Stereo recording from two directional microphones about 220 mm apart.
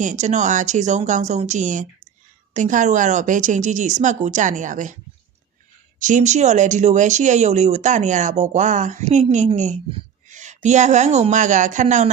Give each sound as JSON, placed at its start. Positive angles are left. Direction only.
{"t": 0.0, "sound": "speech", "side_deg": -35}
{"t": 6.0, "sound": "speech", "side_deg": -35}